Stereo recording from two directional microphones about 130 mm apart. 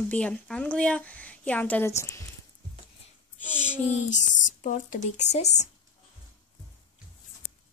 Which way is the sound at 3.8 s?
65° left (ahead or behind).